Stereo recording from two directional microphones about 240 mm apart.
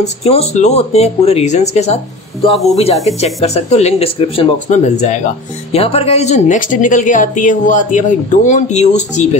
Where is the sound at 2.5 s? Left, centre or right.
Centre.